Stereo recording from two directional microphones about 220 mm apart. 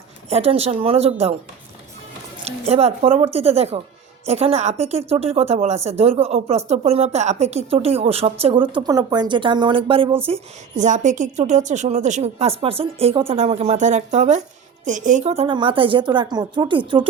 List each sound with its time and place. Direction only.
0.3 s a woman's voice: 30° right (ahead or behind)
2.4 s a woman's voice: 30° right (ahead or behind)